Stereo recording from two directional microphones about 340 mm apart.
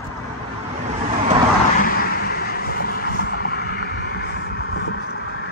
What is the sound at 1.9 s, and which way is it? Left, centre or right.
Vehicle, left.